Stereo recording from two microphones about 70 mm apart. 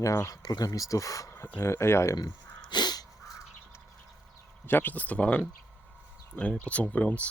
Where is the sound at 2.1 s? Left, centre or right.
Left.